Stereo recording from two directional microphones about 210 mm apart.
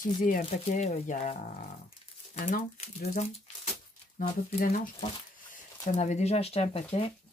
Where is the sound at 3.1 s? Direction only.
30° left (ahead or behind).